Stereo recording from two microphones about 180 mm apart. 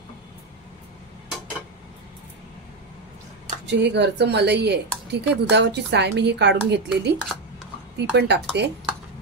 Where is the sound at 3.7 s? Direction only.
70° right (ahead or behind).